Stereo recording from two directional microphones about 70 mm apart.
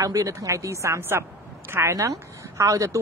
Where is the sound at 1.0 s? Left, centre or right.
Right.